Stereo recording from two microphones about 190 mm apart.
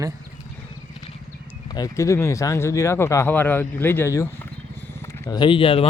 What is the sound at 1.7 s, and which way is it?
Speech, 20° left (ahead or behind).